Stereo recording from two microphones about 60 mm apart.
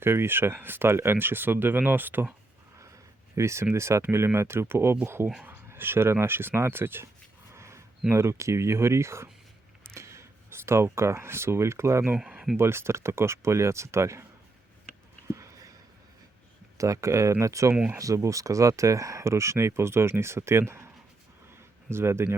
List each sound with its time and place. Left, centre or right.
0.0 s speech: right
3.3 s speech: right
7.5 s a sound: right
8.1 s speech: right
9.8 s a sound: right
10.9 s speech: right
12.2 s a sound: centre
12.5 s speech: right
16.7 s speech: right